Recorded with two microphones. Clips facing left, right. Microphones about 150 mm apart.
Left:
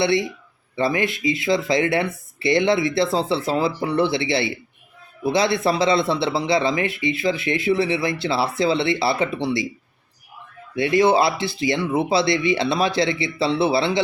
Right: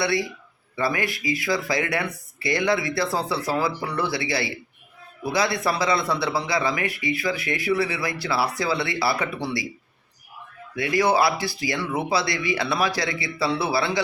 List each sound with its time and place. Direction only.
0.0 s speech: 25° left (ahead or behind)
10.8 s speech: 25° left (ahead or behind)